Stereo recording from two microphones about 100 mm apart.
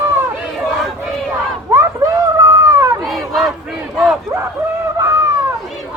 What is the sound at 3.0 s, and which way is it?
Battle cry, centre (ahead or behind).